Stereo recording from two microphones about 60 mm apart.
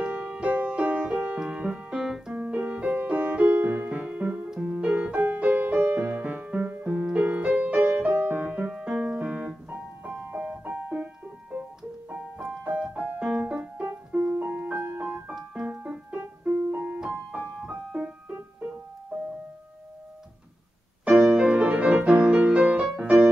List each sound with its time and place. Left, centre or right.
0.0 s music: right
1.4 s keyboard: centre
2.3 s music: right
4.6 s keyboard: centre
4.8 s music: right
8.7 s piano: centre
12.1 s music: centre
13.3 s piano: centre
15.6 s music: right
16.4 s keyboard: right
17.0 s music: centre
21.0 s music: centre
22.9 s music: centre